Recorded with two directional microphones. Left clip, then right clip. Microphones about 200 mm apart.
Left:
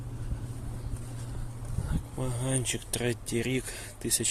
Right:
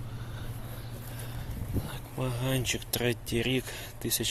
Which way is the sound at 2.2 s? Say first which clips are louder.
Right 2 dB; 10° left (ahead or behind).